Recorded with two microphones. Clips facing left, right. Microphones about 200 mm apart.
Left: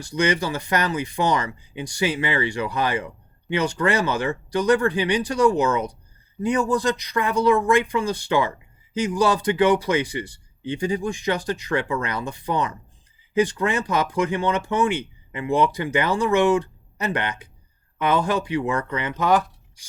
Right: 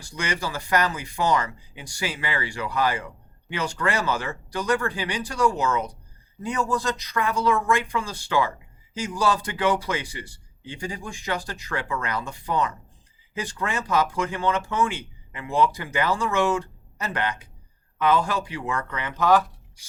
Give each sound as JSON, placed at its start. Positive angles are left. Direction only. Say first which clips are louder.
{"t": 0.0, "sound": "speech", "louder": "left 7 dB", "side_deg": 20}